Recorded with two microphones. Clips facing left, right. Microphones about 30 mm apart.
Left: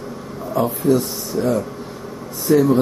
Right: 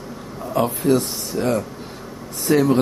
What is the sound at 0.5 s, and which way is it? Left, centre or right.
A man's voice, right.